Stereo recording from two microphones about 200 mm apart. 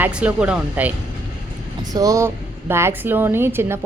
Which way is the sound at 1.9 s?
15° right (ahead or behind).